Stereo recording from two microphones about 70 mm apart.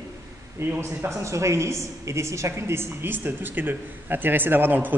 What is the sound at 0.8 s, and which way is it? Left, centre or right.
A woman's voice, right.